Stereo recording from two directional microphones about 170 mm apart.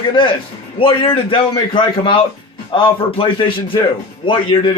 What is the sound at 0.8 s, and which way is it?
A man's voice, 30° left (ahead or behind).